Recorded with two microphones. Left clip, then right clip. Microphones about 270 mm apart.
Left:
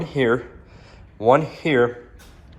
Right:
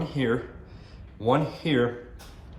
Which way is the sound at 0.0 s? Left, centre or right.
Centre.